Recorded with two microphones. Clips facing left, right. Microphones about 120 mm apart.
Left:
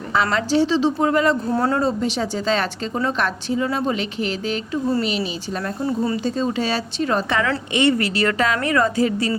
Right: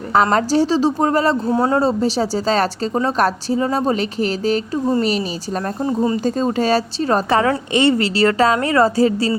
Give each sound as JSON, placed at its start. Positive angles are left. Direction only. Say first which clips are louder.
{"t": 0.1, "sound": "a woman's voice", "louder": "right 4 dB", "side_deg": -45}
{"t": 1.5, "sound": "speech", "louder": "right 3 dB", "side_deg": -15}
{"t": 1.7, "sound": "a woman's voice", "louder": "right 4 dB", "side_deg": -35}
{"t": 6.2, "sound": "a woman's voice", "louder": "right 4 dB", "side_deg": -45}